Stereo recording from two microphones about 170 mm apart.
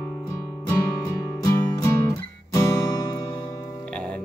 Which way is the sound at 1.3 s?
20° left (ahead or behind).